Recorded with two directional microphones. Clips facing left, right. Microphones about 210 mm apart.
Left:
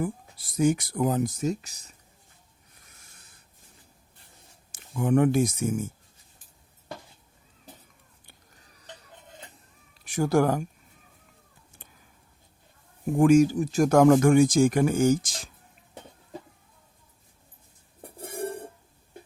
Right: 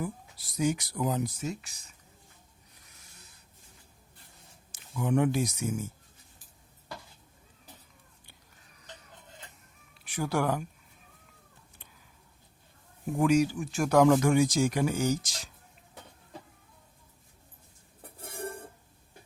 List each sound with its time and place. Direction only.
0.0 s speech: 50° left (ahead or behind)
4.7 s speech: 50° left (ahead or behind)
10.0 s speech: 45° left (ahead or behind)
13.1 s speech: 45° left (ahead or behind)